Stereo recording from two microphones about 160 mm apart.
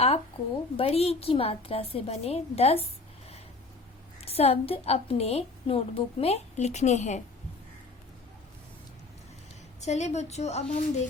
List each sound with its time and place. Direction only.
0.4 s a woman's voice: 35° left (ahead or behind)
4.3 s a woman's voice: 40° left (ahead or behind)
9.8 s a woman's voice: 45° left (ahead or behind)